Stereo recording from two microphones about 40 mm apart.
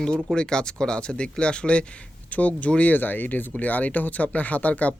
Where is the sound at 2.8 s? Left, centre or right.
Left.